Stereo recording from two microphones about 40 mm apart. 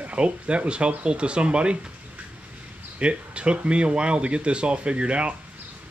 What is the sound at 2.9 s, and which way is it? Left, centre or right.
Speech, right.